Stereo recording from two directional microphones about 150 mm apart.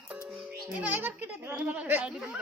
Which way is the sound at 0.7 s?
10° right (ahead or behind).